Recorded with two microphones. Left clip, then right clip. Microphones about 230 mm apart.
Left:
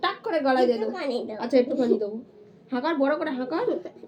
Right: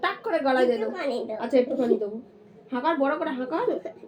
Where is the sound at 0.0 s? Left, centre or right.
Centre.